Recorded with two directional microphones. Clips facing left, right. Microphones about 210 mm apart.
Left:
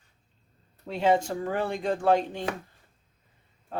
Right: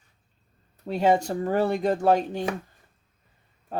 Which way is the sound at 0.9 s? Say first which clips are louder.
Right 2 dB; 40° right (ahead or behind).